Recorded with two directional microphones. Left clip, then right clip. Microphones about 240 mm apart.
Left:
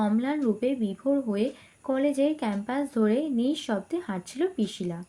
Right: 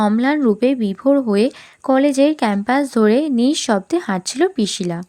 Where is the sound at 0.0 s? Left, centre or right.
Right.